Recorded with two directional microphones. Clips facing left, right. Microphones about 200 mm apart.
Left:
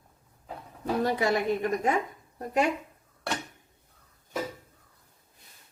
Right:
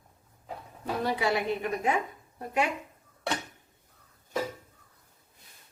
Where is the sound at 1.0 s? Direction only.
45° left (ahead or behind).